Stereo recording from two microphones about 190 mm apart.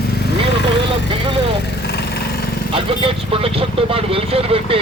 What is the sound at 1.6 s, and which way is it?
Lawn mower, 60° left (ahead or behind).